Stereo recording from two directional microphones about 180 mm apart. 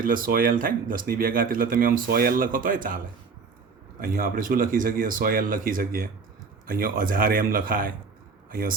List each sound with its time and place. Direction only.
0.0 s speech: 50° right (ahead or behind)
4.0 s speech: 50° right (ahead or behind)